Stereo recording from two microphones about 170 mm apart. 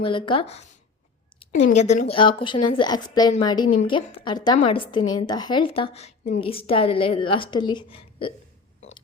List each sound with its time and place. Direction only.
0.0 s speech: 30° left (ahead or behind)
1.7 s a woman's voice: 45° left (ahead or behind)